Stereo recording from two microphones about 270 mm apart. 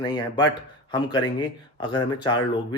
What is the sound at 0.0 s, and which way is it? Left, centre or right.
Speech, centre.